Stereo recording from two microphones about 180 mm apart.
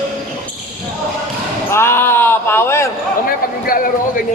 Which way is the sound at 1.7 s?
15° left (ahead or behind).